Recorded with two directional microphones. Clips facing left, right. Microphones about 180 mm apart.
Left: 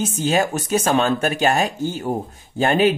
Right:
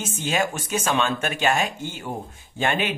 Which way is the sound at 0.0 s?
35° left (ahead or behind).